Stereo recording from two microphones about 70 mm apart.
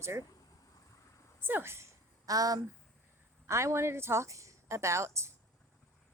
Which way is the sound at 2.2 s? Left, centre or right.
Right.